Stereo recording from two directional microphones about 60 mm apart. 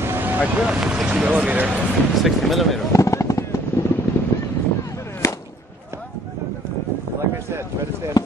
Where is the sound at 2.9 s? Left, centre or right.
Left.